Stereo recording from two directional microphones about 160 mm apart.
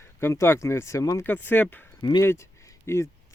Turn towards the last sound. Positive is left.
turn(degrees=20)  # may be behind; listen again after turning